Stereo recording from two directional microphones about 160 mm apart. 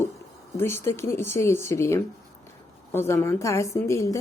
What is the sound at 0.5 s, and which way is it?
A woman's voice, 15° left (ahead or behind).